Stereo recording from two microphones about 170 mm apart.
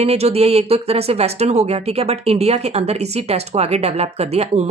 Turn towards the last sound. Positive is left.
turn(degrees=-40)  # may be behind; listen again after turning